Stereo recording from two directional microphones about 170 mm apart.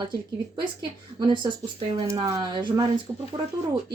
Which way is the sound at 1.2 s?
25° right (ahead or behind).